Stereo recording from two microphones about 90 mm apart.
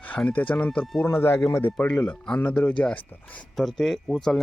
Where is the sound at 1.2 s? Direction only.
30° left (ahead or behind).